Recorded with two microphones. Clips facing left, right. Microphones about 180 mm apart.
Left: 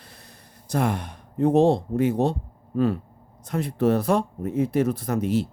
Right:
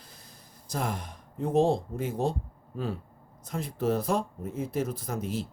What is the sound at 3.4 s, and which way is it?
Speech, 70° left (ahead or behind).